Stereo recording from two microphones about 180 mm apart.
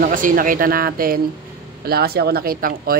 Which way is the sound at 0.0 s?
50° right (ahead or behind).